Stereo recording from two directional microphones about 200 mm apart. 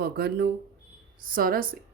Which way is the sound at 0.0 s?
50° right (ahead or behind).